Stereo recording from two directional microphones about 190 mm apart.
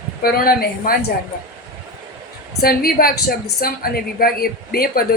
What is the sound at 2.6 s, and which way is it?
Speech, 50° left (ahead or behind).